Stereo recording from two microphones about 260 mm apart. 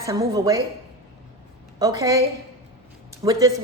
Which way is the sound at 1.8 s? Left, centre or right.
Centre.